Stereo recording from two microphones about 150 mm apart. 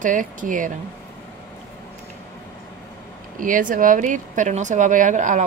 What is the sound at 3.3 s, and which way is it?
Speech, 65° right (ahead or behind).